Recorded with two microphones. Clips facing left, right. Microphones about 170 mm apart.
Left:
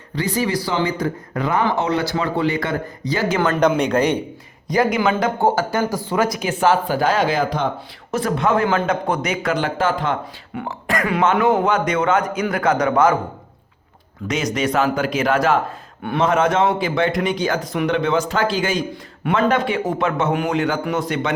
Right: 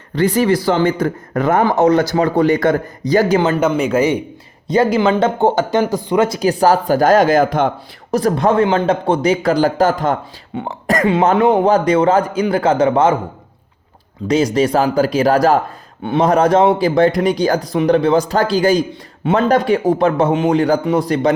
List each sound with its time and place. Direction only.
0.2 s speech: 55° right (ahead or behind); by 3.4 s 40° right (ahead or behind)
3.7 s speech: 5° right (ahead or behind)
4.7 s speech: 25° right (ahead or behind); by 7.7 s 50° right (ahead or behind)
8.1 s speech: 35° right (ahead or behind)
10.5 s speech: 25° right (ahead or behind)
11.2 s speech: 35° right (ahead or behind)
14.3 s speech: 30° right (ahead or behind)